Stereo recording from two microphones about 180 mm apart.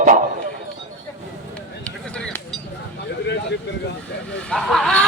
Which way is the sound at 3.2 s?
75° left (ahead or behind).